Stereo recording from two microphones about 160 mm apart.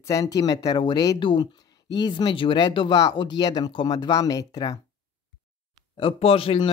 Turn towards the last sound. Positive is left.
turn(degrees=35)  # may be behind; listen again after turning